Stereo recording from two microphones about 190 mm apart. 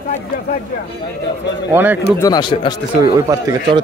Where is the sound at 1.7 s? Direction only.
10° right (ahead or behind).